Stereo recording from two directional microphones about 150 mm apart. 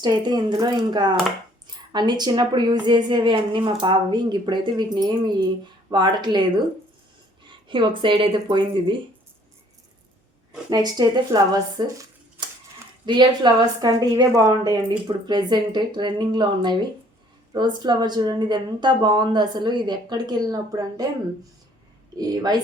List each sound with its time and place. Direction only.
0.0 s a woman's voice: 30° right (ahead or behind)
7.7 s speech: 35° right (ahead or behind)
10.7 s a woman's voice: 25° right (ahead or behind)
13.1 s a woman's voice: 30° right (ahead or behind)
22.2 s a woman's voice: 25° right (ahead or behind)